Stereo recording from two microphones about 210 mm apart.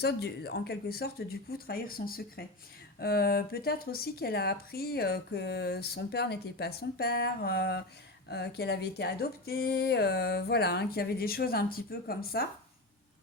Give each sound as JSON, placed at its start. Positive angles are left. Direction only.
{"t": 0.0, "sound": "speech", "side_deg": 50}